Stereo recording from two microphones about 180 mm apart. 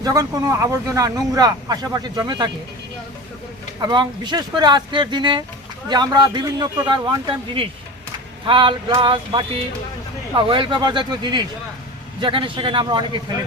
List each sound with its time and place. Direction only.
0.0 s speech: 20° right (ahead or behind)
3.8 s speech: 25° right (ahead or behind)